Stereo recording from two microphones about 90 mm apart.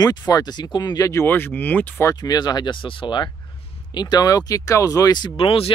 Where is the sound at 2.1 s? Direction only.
50° left (ahead or behind); by 4.0 s 70° left (ahead or behind).